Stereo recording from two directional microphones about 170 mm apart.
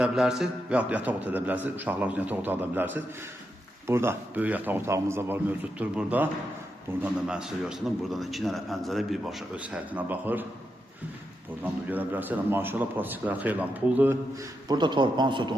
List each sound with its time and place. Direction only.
0.0 s a man's voice: 5° right (ahead or behind)
11.9 s a man's voice: 10° right (ahead or behind)
14.7 s a man's voice: 25° right (ahead or behind)